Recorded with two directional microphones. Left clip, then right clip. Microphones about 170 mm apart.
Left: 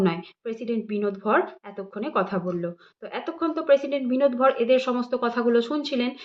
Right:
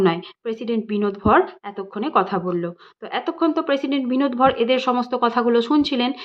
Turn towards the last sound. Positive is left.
turn(degrees=-45)  # may be behind; listen again after turning